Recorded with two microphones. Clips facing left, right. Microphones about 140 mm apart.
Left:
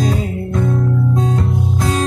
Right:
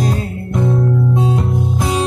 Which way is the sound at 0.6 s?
5° right (ahead or behind).